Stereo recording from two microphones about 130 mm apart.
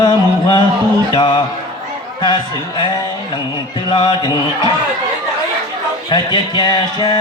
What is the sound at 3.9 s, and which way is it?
Speech, 40° left (ahead or behind).